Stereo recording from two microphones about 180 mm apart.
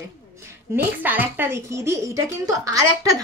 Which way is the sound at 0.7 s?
15° right (ahead or behind).